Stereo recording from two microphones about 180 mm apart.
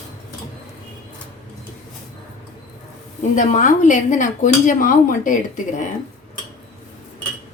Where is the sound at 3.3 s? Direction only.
45° left (ahead or behind).